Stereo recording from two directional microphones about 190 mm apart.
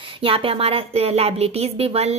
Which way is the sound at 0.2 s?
30° right (ahead or behind).